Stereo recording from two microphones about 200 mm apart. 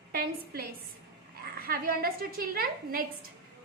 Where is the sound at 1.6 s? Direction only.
45° right (ahead or behind).